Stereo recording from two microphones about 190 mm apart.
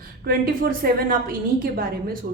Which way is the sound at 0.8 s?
50° right (ahead or behind).